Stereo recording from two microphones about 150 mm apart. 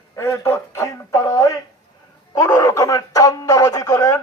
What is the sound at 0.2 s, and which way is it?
Radio, 15° left (ahead or behind).